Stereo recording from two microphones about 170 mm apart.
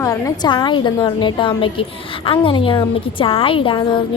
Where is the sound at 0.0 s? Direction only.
20° left (ahead or behind).